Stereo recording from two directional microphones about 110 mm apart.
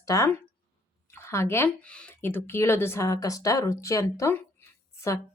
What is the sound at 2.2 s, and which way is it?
Speech, 20° left (ahead or behind).